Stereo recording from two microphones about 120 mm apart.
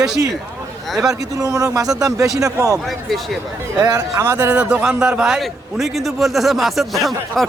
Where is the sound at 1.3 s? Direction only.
30° right (ahead or behind).